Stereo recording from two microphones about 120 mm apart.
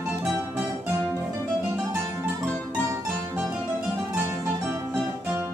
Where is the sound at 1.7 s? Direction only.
30° right (ahead or behind).